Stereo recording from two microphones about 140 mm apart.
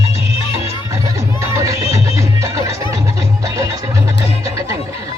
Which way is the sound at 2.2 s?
20° right (ahead or behind).